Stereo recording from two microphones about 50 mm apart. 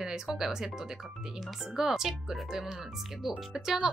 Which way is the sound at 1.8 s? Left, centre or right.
Centre.